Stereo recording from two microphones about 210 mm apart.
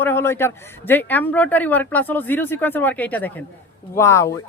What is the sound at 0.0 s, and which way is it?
Speech, 10° left (ahead or behind).